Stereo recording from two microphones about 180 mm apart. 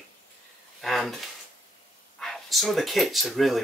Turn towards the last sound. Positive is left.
turn(degrees=0)  # may be behind; listen again after turning